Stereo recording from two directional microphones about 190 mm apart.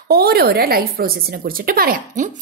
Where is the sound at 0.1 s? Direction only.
55° right (ahead or behind).